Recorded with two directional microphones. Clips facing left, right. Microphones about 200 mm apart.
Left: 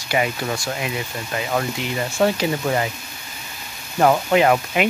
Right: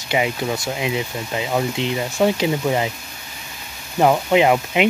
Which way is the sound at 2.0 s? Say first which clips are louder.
Even; 10° right (ahead or behind).